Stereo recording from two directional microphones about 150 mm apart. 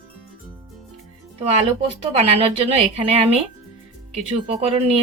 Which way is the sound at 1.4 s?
45° right (ahead or behind).